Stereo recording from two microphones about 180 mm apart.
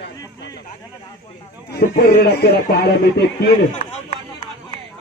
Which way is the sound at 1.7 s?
60° left (ahead or behind).